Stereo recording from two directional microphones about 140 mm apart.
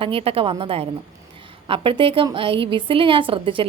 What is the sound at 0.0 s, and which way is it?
A woman's voice, 40° right (ahead or behind).